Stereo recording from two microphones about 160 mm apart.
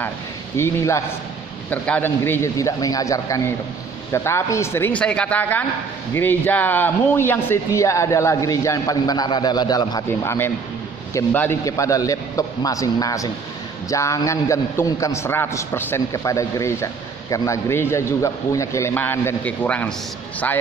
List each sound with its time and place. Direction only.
0.6 s a man's voice: 15° left (ahead or behind)